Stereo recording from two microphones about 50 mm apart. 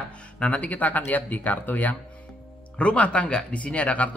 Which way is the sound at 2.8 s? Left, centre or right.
Left.